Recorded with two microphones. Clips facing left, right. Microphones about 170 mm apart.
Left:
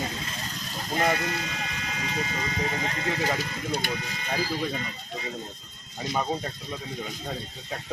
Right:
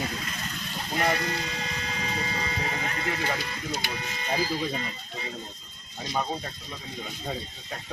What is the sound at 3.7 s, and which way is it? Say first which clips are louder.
Speech: left 4 dB; 50° left (ahead or behind).